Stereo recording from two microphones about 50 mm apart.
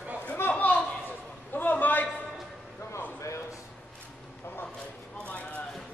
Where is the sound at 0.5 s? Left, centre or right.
Left.